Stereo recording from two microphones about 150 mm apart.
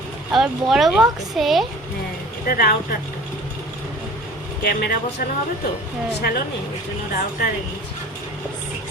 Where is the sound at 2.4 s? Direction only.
75° left (ahead or behind).